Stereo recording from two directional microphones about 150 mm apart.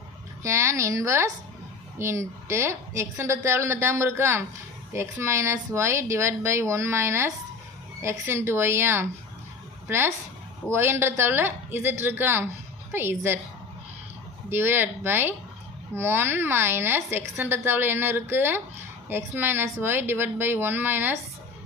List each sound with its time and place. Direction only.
0.4 s a woman's voice: 20° right (ahead or behind)
14.5 s a woman's voice: 15° right (ahead or behind)